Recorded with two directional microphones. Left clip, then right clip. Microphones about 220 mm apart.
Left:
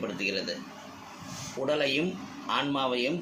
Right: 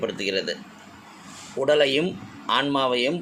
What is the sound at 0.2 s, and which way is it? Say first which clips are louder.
Speech: right 5 dB; 40° right (ahead or behind).